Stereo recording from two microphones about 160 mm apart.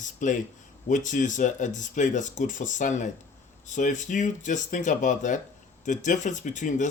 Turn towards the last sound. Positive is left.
turn(degrees=50)  # may be behind; listen again after turning